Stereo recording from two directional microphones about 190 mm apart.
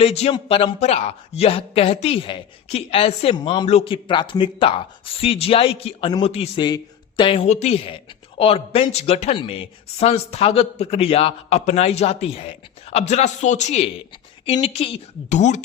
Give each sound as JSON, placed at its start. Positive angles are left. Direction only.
{"t": 0.0, "sound": "a man's voice", "side_deg": 35}